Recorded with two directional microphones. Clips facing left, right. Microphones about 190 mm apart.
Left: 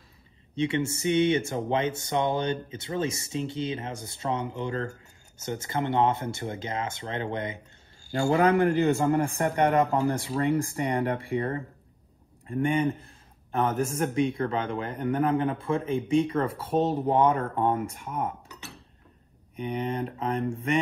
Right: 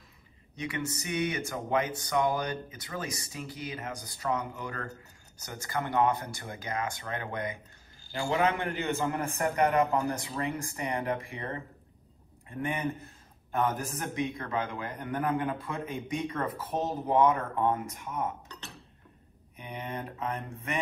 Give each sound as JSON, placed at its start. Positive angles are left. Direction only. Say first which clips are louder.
{"t": 0.6, "sound": "a man's voice", "louder": "left 8 dB", "side_deg": 25}
{"t": 8.1, "sound": "a man's voice", "louder": "left 6 dB", "side_deg": 35}
{"t": 19.5, "sound": "speech", "louder": "left 8 dB", "side_deg": 30}